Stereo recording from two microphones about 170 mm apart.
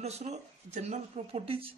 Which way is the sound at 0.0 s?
40° right (ahead or behind).